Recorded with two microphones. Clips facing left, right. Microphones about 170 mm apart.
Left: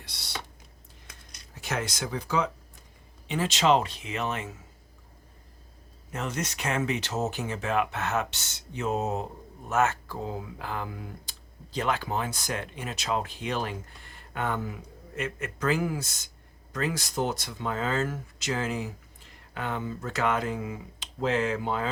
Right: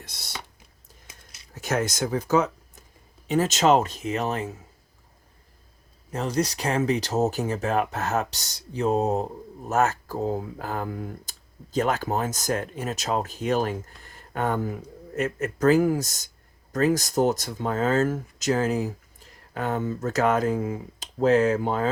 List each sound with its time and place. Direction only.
0.0 s speech: 45° right (ahead or behind)
1.0 s a sound: 5° right (ahead or behind)
1.5 s speech: 45° right (ahead or behind)
6.1 s speech: 35° right (ahead or behind)